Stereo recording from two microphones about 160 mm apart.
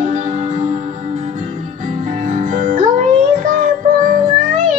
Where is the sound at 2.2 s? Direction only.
50° right (ahead or behind).